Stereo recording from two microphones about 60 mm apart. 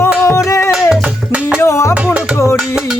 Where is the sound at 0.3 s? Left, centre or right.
Left.